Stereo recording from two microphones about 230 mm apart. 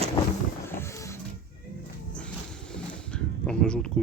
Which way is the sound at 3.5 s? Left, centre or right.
Centre.